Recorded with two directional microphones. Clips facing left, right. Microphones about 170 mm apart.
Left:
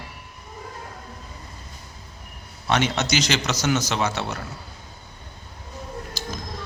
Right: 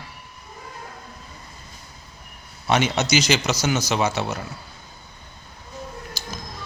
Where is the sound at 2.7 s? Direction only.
10° right (ahead or behind).